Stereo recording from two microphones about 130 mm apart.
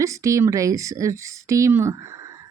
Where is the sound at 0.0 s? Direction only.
25° right (ahead or behind).